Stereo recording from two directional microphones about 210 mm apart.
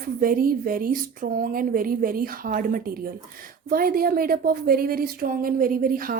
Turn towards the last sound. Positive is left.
turn(degrees=-40)  # may be behind; listen again after turning